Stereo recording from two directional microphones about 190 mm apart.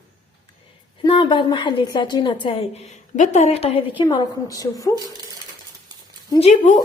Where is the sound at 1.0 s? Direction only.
25° left (ahead or behind).